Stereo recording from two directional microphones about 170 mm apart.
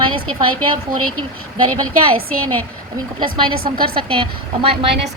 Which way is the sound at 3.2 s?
30° right (ahead or behind).